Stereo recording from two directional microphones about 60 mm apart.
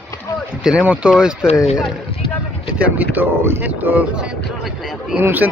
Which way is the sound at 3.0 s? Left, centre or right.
Right.